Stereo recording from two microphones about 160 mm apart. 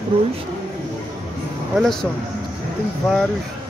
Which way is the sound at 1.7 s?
Centre (ahead or behind).